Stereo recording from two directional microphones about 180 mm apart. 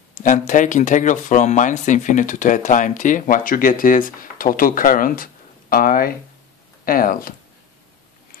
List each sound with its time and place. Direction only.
0.2 s speech: 45° left (ahead or behind)